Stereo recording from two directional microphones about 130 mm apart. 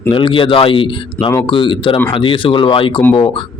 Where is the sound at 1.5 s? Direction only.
40° left (ahead or behind).